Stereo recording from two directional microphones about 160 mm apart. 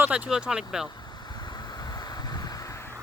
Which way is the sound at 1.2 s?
25° left (ahead or behind).